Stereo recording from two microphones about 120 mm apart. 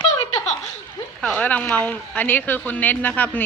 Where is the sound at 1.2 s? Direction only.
10° left (ahead or behind).